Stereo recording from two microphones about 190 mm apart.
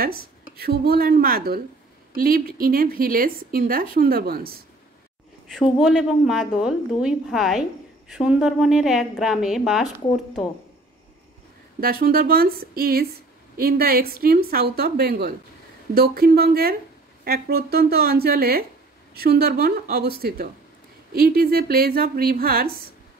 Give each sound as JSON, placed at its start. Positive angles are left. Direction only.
{"t": 0.0, "sound": "a woman's voice", "side_deg": -55}
{"t": 5.5, "sound": "a woman's voice", "side_deg": 0}
{"t": 11.8, "sound": "a woman's voice", "side_deg": -50}